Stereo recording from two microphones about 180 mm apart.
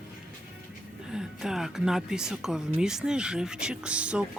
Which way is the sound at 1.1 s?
5° right (ahead or behind).